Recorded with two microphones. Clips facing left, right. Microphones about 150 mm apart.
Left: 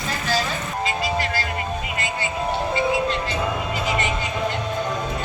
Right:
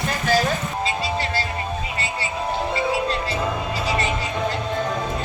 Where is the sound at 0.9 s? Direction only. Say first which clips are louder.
Left 2 dB; 30° right (ahead or behind).